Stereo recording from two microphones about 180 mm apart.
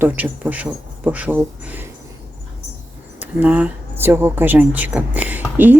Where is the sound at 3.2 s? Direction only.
10° right (ahead or behind).